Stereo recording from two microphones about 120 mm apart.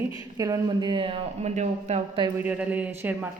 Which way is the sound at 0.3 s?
30° right (ahead or behind).